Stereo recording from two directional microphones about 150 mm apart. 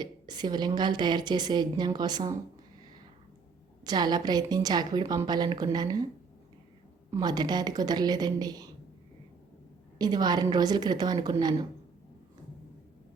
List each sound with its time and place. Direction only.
0.0 s a woman's voice: 30° right (ahead or behind)
3.8 s a woman's voice: 30° right (ahead or behind)
7.1 s a woman's voice: 25° right (ahead or behind)
10.0 s a woman's voice: 25° right (ahead or behind)